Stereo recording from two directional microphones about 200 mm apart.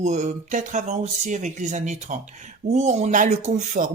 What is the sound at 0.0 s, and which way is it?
Speech, 35° right (ahead or behind).